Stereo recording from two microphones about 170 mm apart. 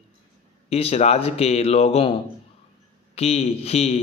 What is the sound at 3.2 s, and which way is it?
Speech, 35° left (ahead or behind).